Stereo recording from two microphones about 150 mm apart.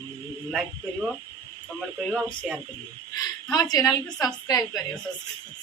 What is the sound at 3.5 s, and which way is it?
A woman's voice, 25° left (ahead or behind).